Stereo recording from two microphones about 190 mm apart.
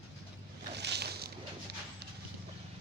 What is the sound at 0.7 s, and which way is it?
Boat, 60° right (ahead or behind).